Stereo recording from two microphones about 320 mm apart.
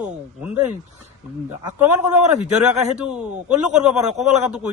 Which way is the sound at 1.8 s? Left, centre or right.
Centre.